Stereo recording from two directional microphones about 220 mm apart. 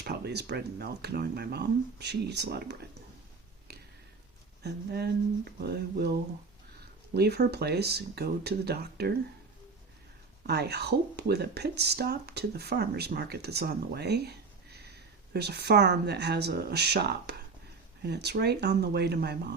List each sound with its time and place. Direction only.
0.0 s speech: 45° right (ahead or behind)
4.6 s speech: 45° right (ahead or behind)
10.4 s speech: 50° right (ahead or behind)